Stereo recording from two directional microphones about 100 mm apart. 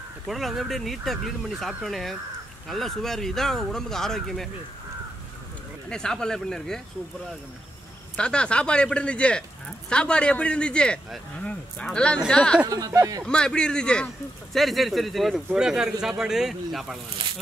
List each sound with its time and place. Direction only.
0.3 s speech: centre (ahead or behind)
5.9 s speech: 5° left (ahead or behind)
8.2 s speech: 10° left (ahead or behind)
12.6 s speech: 40° right (ahead or behind)
13.2 s speech: 5° left (ahead or behind)